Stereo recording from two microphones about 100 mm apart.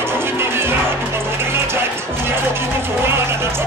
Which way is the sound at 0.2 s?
25° right (ahead or behind).